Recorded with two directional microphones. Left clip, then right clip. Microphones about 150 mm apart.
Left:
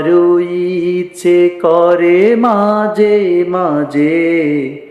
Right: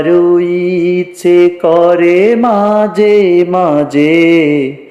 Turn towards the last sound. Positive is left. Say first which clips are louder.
# right 4 dB
turn(degrees=-30)  # may be behind; listen again after turning